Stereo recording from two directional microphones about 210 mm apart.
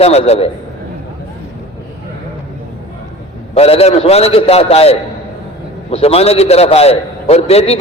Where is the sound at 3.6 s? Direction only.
30° left (ahead or behind).